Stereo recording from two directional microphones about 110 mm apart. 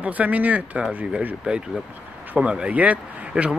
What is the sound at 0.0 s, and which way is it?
Speech, 15° right (ahead or behind).